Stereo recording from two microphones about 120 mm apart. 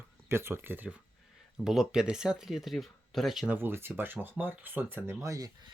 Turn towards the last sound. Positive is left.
turn(degrees=-30)  # may be behind; listen again after turning